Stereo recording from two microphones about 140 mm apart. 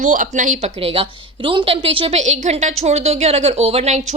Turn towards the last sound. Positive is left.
turn(degrees=-50)  # may be behind; listen again after turning